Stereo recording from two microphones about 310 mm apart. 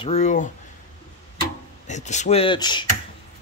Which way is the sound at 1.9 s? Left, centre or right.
Left.